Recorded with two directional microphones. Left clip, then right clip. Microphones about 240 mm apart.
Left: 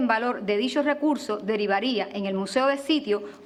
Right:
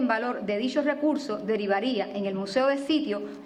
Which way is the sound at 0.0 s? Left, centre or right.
Left.